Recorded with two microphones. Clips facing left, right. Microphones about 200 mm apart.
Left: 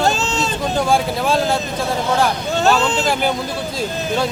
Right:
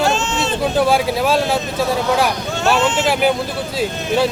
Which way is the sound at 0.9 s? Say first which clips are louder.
Right 1 dB; 5° right (ahead or behind).